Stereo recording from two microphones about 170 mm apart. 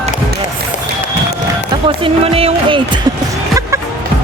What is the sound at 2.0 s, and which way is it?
Music, 35° right (ahead or behind).